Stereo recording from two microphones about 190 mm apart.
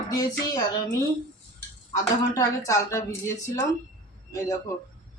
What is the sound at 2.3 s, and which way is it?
A woman's voice, 15° left (ahead or behind).